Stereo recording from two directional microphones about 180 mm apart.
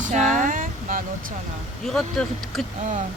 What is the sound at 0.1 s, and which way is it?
Vehicle, 45° right (ahead or behind).